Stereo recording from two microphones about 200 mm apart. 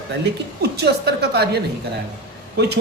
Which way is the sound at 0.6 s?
55° right (ahead or behind).